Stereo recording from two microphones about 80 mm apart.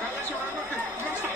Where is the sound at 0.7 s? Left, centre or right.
Right.